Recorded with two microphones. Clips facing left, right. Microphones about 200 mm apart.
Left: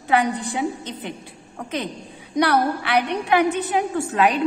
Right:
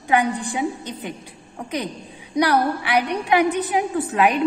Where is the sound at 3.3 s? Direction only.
15° right (ahead or behind).